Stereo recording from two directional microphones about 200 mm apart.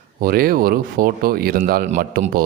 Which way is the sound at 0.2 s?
45° right (ahead or behind).